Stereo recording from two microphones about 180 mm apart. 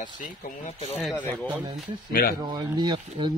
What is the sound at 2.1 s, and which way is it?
Speech, 55° left (ahead or behind).